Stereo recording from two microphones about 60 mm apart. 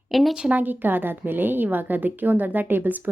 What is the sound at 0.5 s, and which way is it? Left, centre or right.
A woman's voice, right.